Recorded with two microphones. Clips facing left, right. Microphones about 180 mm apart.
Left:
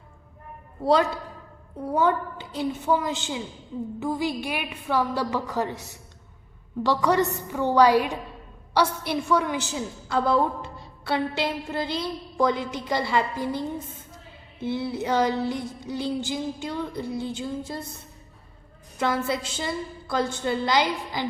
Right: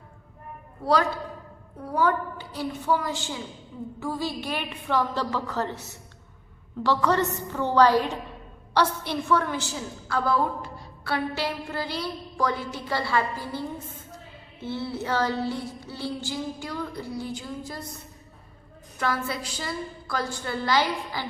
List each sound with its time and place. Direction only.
1.8 s a woman's voice: 25° left (ahead or behind)
18.9 s a woman's voice: 20° left (ahead or behind)